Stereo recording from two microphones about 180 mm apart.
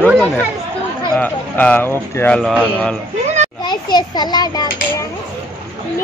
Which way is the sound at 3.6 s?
25° left (ahead or behind).